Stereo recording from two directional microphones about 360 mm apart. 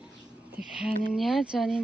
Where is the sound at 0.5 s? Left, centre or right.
Centre.